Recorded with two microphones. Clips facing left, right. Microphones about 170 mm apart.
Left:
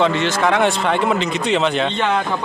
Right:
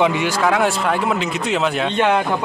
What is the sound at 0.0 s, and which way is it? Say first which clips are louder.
A man's voice: even; 10° right (ahead or behind).